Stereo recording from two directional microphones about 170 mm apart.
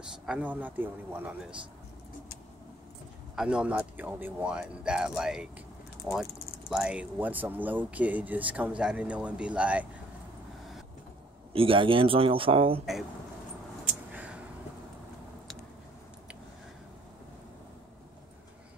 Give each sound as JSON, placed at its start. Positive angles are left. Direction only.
{"t": 0.3, "sound": "speech", "side_deg": -10}
{"t": 3.3, "sound": "speech", "side_deg": -5}
{"t": 11.5, "sound": "a man's voice", "side_deg": -30}
{"t": 14.1, "sound": "a sound", "side_deg": -10}